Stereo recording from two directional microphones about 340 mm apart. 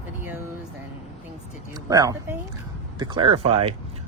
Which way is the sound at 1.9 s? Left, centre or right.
Centre.